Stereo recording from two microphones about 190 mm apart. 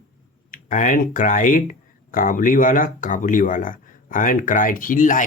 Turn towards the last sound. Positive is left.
turn(degrees=45)  # may be behind; listen again after turning